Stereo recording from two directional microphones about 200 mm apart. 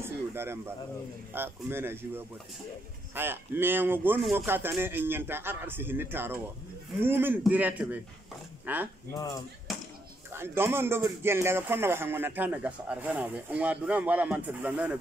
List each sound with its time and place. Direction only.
0.0 s a sound: 10° right (ahead or behind)
1.3 s a man's voice: 10° right (ahead or behind)
9.1 s speech: 15° left (ahead or behind)
9.7 s chop: centre (ahead or behind)
10.3 s a man's voice: 10° right (ahead or behind)